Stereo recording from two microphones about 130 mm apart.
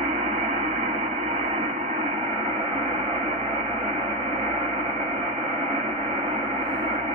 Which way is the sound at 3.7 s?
45° right (ahead or behind).